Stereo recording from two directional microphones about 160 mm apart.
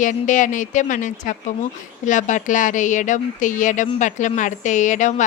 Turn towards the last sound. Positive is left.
turn(degrees=50)  # may be behind; listen again after turning